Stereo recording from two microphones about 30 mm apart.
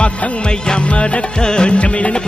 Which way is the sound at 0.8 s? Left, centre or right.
Left.